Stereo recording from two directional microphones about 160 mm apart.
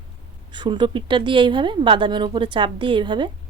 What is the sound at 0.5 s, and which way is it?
A woman's voice, 30° right (ahead or behind).